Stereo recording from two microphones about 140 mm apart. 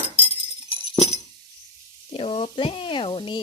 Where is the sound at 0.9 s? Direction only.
45° left (ahead or behind).